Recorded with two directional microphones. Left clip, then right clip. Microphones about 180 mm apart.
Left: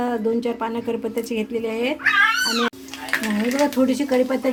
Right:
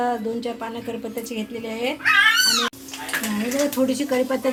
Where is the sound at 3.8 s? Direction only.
40° left (ahead or behind).